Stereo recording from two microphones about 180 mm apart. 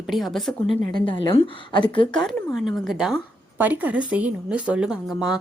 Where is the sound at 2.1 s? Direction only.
Centre (ahead or behind).